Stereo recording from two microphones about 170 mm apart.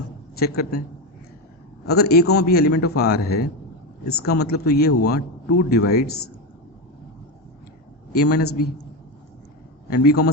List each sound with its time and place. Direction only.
0.3 s a man's voice: 65° left (ahead or behind)
1.9 s a man's voice: 70° left (ahead or behind)
8.1 s a man's voice: 65° left (ahead or behind)
9.9 s a man's voice: 65° left (ahead or behind)